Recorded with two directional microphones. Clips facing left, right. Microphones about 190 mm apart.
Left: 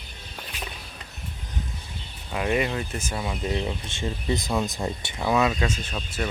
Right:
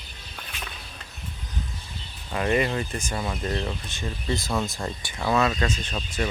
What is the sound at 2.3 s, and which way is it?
Speech, 5° left (ahead or behind).